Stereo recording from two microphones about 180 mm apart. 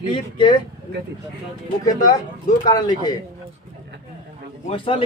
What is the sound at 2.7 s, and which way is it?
Speech, 20° left (ahead or behind).